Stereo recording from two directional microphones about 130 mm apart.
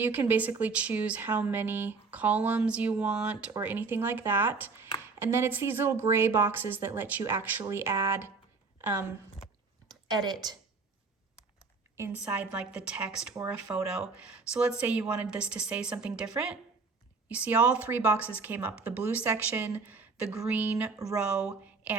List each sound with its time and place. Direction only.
0.0 s speech: 15° right (ahead or behind)
9.9 s speech: 30° right (ahead or behind)
11.9 s a woman's voice: 20° right (ahead or behind)
17.2 s a woman's voice: 10° right (ahead or behind)